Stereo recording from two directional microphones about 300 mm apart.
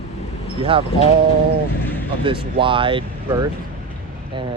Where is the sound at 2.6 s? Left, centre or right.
Centre.